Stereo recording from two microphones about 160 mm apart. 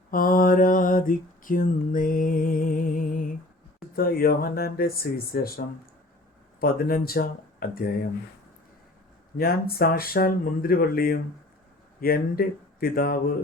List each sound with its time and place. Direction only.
0.1 s mantra: 60° left (ahead or behind)
3.8 s speech: 70° left (ahead or behind)
9.4 s speech: 70° left (ahead or behind)